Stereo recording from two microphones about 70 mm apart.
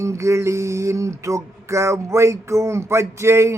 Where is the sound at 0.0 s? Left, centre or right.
Right.